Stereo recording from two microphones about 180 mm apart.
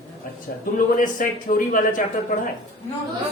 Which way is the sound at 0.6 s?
50° left (ahead or behind).